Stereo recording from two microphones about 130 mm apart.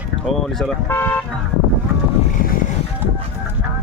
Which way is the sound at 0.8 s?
20° left (ahead or behind).